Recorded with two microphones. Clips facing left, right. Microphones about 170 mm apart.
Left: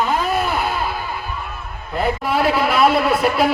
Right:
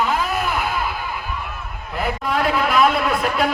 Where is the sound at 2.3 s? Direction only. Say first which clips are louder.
Left 1 dB; 5° left (ahead or behind).